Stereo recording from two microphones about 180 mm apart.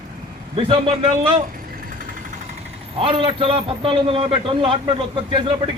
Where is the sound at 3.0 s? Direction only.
30° right (ahead or behind).